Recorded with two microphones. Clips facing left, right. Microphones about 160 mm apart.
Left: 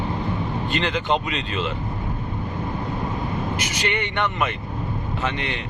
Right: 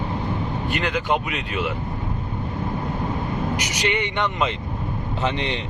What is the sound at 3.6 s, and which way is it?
Speech, 15° right (ahead or behind).